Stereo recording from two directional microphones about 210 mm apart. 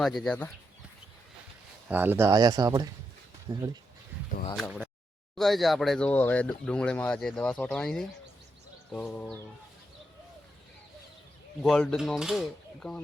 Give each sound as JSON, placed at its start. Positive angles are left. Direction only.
{"t": 0.0, "sound": "speech", "side_deg": 0}
{"t": 1.9, "sound": "speech", "side_deg": -10}
{"t": 4.5, "sound": "speech", "side_deg": 0}
{"t": 8.9, "sound": "a sound", "side_deg": 5}
{"t": 11.6, "sound": "speech", "side_deg": 5}